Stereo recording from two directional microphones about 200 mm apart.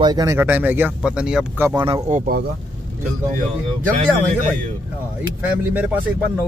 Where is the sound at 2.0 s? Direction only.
35° right (ahead or behind).